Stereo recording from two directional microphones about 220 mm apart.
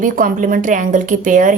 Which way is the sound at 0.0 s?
40° right (ahead or behind).